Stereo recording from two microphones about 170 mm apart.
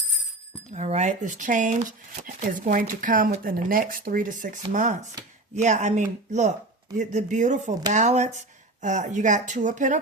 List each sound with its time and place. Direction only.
0.7 s speech: 40° right (ahead or behind)